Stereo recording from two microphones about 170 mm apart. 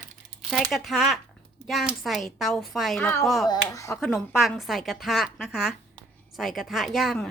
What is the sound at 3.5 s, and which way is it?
Speech, 20° left (ahead or behind).